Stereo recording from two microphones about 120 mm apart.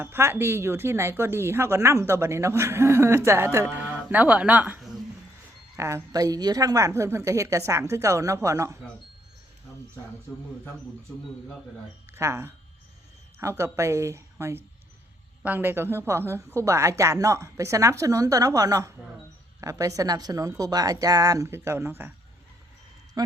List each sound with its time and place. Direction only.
0.0 s speech: 20° right (ahead or behind)
5.7 s speech: 25° right (ahead or behind)
12.1 s speech: 20° right (ahead or behind)
23.2 s speech: 35° right (ahead or behind)